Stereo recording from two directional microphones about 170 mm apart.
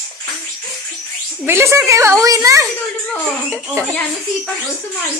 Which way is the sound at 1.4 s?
15° right (ahead or behind).